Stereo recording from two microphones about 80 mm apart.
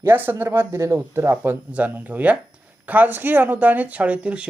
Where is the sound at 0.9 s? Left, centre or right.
Right.